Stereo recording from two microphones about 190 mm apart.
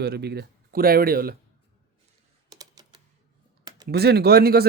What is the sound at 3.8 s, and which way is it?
Speech, 60° right (ahead or behind).